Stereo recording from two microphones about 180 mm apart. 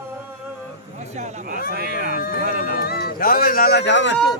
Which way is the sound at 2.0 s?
50° left (ahead or behind).